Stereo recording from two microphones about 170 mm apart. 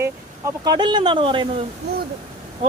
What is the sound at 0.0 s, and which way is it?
Speech, 20° right (ahead or behind).